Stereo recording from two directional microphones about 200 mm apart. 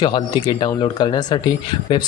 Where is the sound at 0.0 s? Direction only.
20° left (ahead or behind).